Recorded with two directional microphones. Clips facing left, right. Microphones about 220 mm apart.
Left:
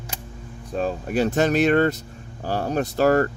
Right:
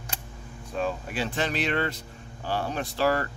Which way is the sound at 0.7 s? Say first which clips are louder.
Left 6 dB; 40° left (ahead or behind).